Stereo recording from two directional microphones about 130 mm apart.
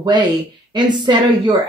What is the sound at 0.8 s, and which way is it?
Speech, 35° right (ahead or behind).